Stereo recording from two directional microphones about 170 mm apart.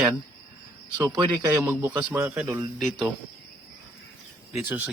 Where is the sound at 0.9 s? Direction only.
20° right (ahead or behind).